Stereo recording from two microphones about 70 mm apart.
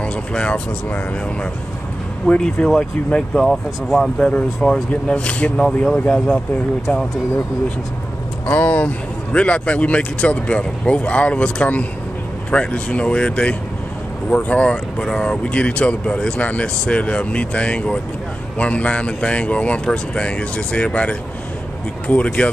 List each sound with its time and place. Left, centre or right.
0.0 s speech: centre
2.2 s speech: centre
3.4 s speech: centre
4.2 s speech: centre
8.5 s speech: left